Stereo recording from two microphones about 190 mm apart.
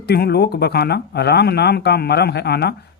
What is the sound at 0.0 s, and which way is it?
Speech, 55° left (ahead or behind).